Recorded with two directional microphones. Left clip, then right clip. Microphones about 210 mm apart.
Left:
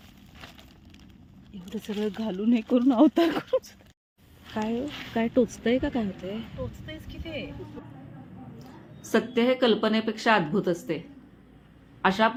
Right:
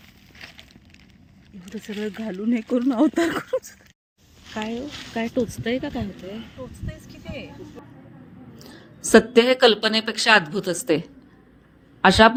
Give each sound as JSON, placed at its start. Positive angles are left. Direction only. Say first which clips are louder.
{"t": 1.6, "sound": "speech", "louder": "even", "side_deg": 5}
{"t": 4.5, "sound": "speech", "louder": "right 1 dB", "side_deg": 5}
{"t": 8.5, "sound": "a woman's voice", "louder": "right 3 dB", "side_deg": -40}
{"t": 12.0, "sound": "a woman's voice", "louder": "right 9 dB", "side_deg": -40}